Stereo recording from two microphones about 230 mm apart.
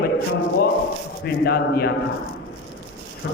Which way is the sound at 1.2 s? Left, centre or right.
Left.